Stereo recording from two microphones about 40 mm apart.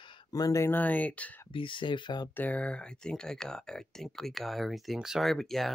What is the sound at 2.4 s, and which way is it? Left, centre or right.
Speech, left.